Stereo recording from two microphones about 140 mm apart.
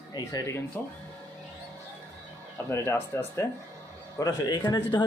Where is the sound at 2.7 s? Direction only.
15° left (ahead or behind).